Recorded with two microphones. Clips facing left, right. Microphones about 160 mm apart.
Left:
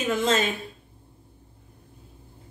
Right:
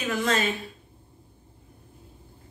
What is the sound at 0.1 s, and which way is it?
Speech, 25° left (ahead or behind).